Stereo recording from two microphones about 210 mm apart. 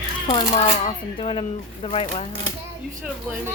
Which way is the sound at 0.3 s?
25° left (ahead or behind).